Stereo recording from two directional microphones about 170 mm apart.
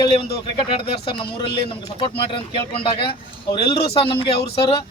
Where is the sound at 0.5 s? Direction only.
30° left (ahead or behind).